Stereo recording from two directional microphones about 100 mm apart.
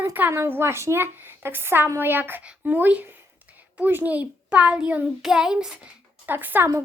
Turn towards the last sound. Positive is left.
turn(degrees=-20)  # may be behind; listen again after turning